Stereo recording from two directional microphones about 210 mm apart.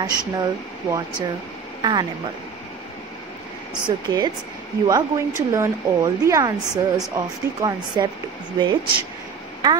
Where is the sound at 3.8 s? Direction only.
20° right (ahead or behind).